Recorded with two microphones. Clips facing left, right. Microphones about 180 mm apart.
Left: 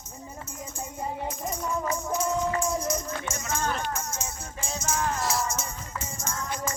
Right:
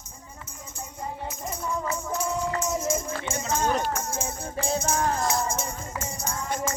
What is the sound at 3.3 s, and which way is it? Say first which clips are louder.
Run: right 5 dB; 30° right (ahead or behind).